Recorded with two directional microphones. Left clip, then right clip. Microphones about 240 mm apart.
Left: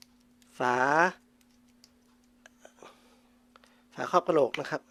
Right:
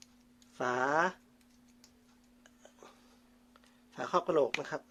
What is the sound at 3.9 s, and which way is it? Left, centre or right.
Speech, left.